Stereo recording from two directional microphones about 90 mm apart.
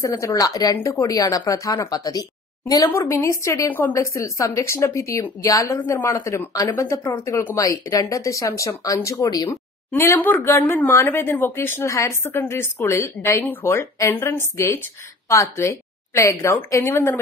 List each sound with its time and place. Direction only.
0.0 s a woman's voice: 35° left (ahead or behind)
2.9 s speech: 30° left (ahead or behind)
5.9 s speech: 25° left (ahead or behind)
6.5 s speech: 40° left (ahead or behind)
9.9 s a woman's voice: 25° left (ahead or behind)